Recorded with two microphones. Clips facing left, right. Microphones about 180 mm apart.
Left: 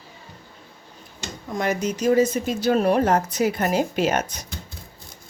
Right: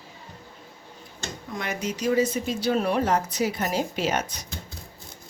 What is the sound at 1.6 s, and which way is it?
Speech, 45° left (ahead or behind).